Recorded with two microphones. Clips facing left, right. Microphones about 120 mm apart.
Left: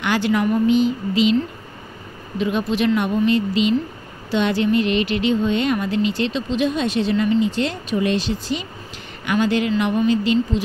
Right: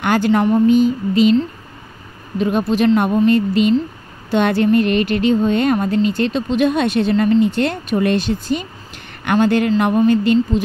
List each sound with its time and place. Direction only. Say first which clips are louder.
0.0 s a woman's voice: right 4 dB; 45° right (ahead or behind)
0.3 s speech: right 4 dB; 35° right (ahead or behind)
2.3 s speech: right 4 dB; 45° right (ahead or behind)